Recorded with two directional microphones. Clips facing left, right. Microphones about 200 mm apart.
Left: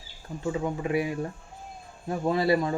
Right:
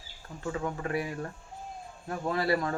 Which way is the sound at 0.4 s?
15° left (ahead or behind).